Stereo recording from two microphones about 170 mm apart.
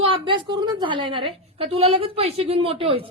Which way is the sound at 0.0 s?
30° right (ahead or behind).